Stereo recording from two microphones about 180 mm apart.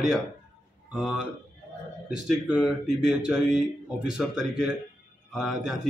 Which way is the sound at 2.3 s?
5° right (ahead or behind).